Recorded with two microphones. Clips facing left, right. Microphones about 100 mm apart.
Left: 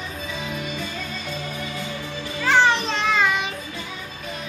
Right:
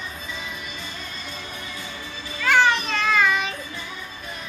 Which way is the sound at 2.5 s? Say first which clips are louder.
Left 1 dB; 25° left (ahead or behind).